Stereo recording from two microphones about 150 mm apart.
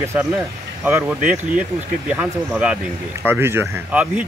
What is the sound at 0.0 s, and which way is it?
Speech, 20° right (ahead or behind).